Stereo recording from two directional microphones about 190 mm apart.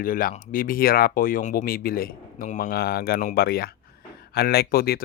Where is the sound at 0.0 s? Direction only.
45° left (ahead or behind).